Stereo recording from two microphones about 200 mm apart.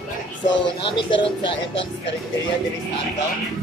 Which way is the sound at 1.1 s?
25° left (ahead or behind).